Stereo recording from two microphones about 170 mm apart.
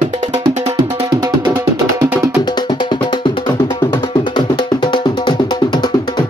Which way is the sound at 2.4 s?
25° left (ahead or behind).